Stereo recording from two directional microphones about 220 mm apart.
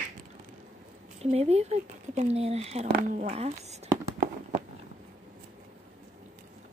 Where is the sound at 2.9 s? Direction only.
40° right (ahead or behind).